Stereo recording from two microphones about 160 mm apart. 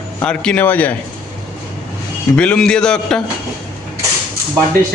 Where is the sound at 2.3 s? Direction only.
5° left (ahead or behind).